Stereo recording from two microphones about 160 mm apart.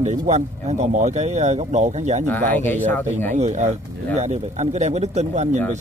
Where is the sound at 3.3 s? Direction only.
45° right (ahead or behind).